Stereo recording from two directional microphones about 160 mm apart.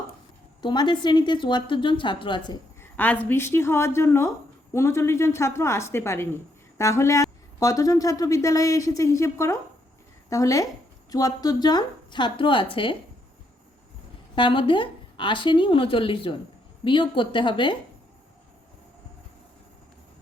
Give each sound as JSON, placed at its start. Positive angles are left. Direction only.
{"t": 0.6, "sound": "a woman's voice", "side_deg": 30}
{"t": 2.9, "sound": "a woman's voice", "side_deg": 10}
{"t": 14.3, "sound": "a woman's voice", "side_deg": 30}